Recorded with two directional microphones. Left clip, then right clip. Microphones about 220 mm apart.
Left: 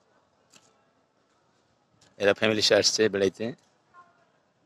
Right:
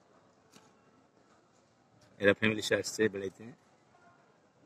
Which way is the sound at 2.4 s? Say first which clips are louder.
Left 9 dB; 15° left (ahead or behind).